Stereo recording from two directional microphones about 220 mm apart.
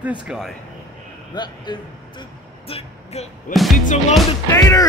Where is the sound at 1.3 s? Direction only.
20° left (ahead or behind); by 4.0 s 35° left (ahead or behind).